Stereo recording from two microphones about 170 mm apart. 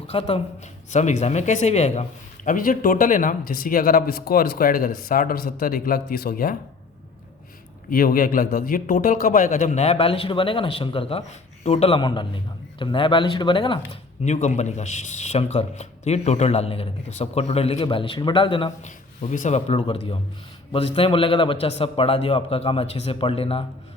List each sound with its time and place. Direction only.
0.1 s a man's voice: 35° left (ahead or behind); by 6.6 s 55° left (ahead or behind)
7.9 s a man's voice: 60° left (ahead or behind); by 13.7 s 30° left (ahead or behind)
14.3 s a man's voice: 45° left (ahead or behind)
18.8 s a man's voice: 45° left (ahead or behind)